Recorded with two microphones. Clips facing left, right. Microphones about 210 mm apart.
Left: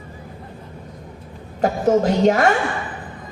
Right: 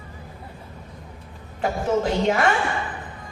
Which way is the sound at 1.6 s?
40° left (ahead or behind).